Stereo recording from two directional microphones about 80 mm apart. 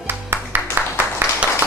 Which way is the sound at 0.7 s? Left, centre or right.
Right.